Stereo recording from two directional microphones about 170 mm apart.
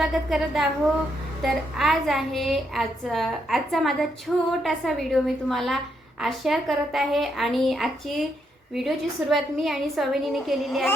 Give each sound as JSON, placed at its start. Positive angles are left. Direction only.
{"t": 0.0, "sound": "a woman's voice", "side_deg": 0}